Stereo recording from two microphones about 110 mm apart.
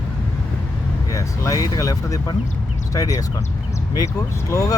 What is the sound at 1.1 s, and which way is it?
Speech, 30° left (ahead or behind).